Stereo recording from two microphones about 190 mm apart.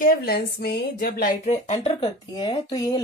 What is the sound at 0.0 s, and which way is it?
A woman's voice, 50° left (ahead or behind).